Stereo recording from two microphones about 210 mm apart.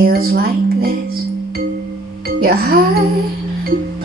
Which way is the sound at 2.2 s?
45° right (ahead or behind).